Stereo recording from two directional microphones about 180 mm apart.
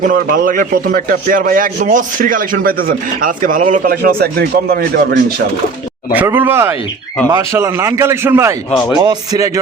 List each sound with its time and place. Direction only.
0.1 s a man's voice: 50° right (ahead or behind)
6.1 s a man's voice: 10° right (ahead or behind)